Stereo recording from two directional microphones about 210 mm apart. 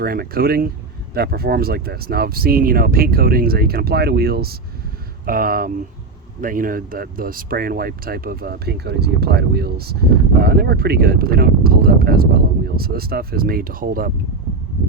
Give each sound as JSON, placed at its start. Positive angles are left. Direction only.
{"t": 0.0, "sound": "speech", "side_deg": -45}